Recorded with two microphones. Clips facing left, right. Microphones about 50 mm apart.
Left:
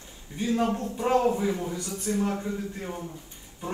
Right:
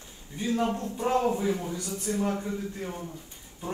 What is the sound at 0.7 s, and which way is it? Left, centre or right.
A man's voice, left.